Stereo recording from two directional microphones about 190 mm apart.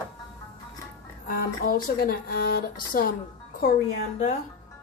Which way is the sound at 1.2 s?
50° left (ahead or behind).